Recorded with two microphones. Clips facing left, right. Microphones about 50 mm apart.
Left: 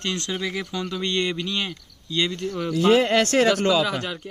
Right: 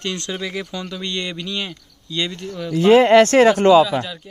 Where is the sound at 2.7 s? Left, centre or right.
Right.